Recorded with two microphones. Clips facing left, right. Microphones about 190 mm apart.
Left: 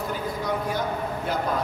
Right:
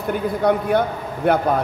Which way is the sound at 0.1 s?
60° right (ahead or behind).